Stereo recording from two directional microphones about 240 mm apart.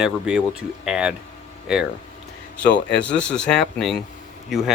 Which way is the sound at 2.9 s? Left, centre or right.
Centre.